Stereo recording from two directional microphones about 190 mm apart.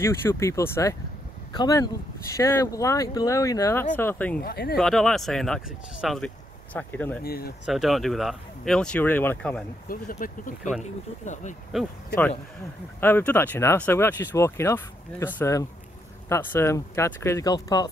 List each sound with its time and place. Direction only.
0.0 s speech: 15° left (ahead or behind)
4.4 s speech: 55° left (ahead or behind)
4.7 s speech: centre (ahead or behind)
7.2 s speech: 55° left (ahead or behind)
7.6 s speech: centre (ahead or behind)
9.8 s speech: 45° left (ahead or behind)
11.7 s speech: centre (ahead or behind)
13.0 s speech: 10° left (ahead or behind)